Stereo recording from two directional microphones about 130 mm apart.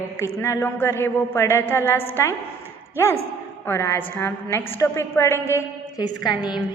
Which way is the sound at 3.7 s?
20° left (ahead or behind).